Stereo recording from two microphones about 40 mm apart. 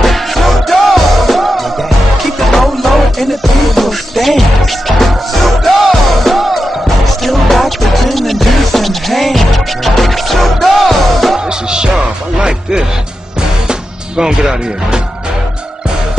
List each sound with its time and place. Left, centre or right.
0.0 s music: centre
11.3 s music: centre